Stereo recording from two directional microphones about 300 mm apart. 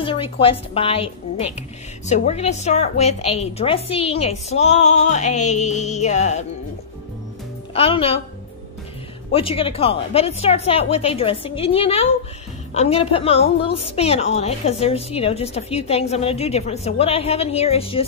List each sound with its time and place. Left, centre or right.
0.0 s a woman's voice: centre
7.7 s a woman's voice: centre
9.3 s a woman's voice: centre